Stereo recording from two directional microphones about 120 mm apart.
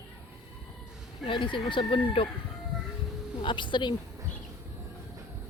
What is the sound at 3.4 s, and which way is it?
Speech, 40° left (ahead or behind).